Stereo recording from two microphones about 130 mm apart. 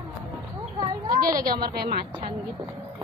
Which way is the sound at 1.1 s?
90° right.